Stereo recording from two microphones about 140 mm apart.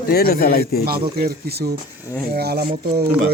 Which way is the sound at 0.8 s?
90° right.